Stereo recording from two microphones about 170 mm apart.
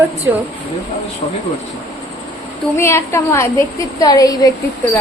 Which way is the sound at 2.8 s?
15° left (ahead or behind).